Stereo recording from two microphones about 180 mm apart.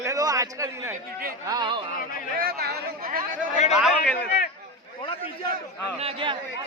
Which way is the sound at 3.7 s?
Centre (ahead or behind).